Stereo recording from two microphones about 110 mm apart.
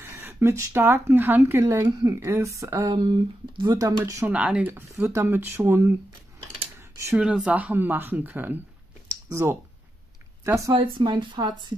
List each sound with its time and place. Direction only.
0.0 s speech: 25° right (ahead or behind)
3.0 s speech: 50° right (ahead or behind); by 4.3 s 30° right (ahead or behind)
4.3 s speech: 10° right (ahead or behind)
6.8 s a sound: 25° right (ahead or behind)
7.2 s speech: 10° right (ahead or behind); by 10.7 s 25° right (ahead or behind)
10.7 s speech: 50° right (ahead or behind)